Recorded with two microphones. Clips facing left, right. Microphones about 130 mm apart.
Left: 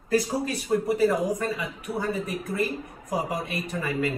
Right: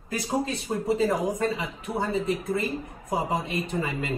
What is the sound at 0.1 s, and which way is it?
Speech, 25° right (ahead or behind).